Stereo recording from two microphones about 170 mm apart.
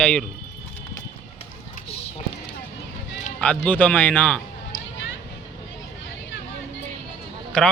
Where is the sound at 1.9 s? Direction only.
35° left (ahead or behind).